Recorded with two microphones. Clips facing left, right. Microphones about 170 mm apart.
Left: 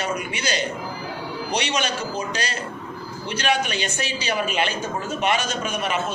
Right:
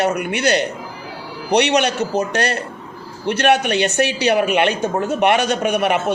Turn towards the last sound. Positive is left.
turn(degrees=-65)  # may be behind; listen again after turning